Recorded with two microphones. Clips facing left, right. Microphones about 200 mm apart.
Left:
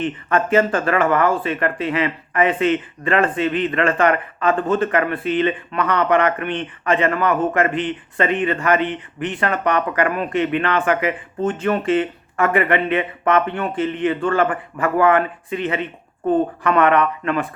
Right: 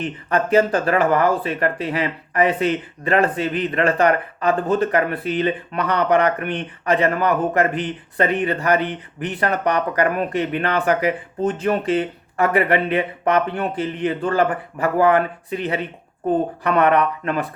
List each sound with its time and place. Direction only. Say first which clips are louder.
0.0 s speech: left 1 dB; 35° right (ahead or behind)